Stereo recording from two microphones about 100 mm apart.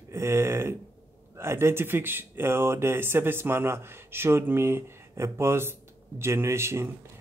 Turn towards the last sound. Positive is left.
turn(degrees=-25)  # may be behind; listen again after turning